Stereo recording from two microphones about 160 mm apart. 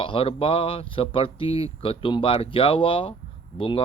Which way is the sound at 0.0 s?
35° left (ahead or behind).